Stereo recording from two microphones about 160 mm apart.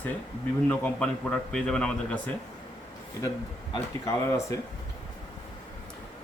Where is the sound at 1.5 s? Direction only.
5° left (ahead or behind).